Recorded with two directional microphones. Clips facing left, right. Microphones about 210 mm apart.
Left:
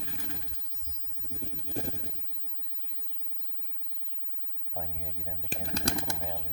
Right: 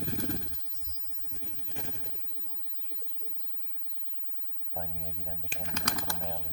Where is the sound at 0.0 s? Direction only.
45° right (ahead or behind).